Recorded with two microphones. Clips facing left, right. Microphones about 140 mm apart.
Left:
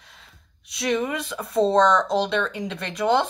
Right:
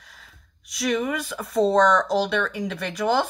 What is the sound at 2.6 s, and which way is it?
Speech, 5° right (ahead or behind).